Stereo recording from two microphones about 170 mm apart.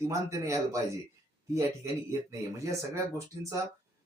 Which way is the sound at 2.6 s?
20° right (ahead or behind).